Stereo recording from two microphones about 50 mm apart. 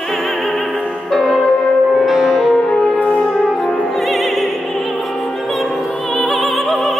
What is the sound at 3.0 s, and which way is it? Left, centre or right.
French horn, left.